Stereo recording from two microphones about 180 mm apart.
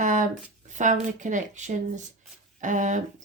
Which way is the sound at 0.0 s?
45° right (ahead or behind).